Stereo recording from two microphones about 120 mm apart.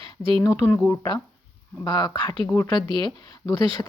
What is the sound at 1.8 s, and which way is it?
Speech, 35° left (ahead or behind).